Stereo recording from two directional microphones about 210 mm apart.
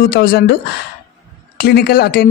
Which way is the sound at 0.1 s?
50° left (ahead or behind).